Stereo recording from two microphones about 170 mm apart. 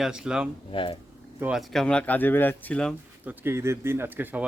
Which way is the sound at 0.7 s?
30° left (ahead or behind).